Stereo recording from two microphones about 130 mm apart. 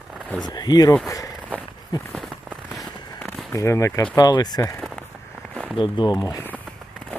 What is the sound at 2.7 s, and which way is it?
Fireworks, 5° left (ahead or behind).